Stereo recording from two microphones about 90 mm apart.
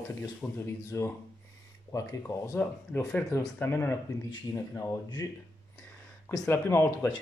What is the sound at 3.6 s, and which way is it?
Speech, 25° left (ahead or behind).